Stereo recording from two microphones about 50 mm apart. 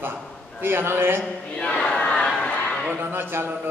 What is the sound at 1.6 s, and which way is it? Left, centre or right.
Crowd, centre.